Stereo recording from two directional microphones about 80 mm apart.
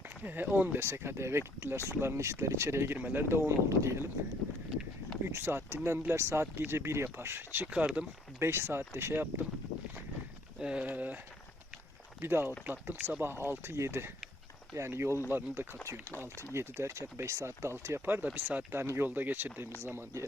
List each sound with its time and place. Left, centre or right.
0.3 s speech: right
5.2 s speech: right
7.7 s speech: centre
8.4 s speech: right
10.6 s speech: centre
12.2 s speech: right